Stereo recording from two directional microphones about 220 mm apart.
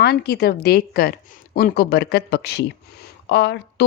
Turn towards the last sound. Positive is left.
turn(degrees=50)  # may be behind; listen again after turning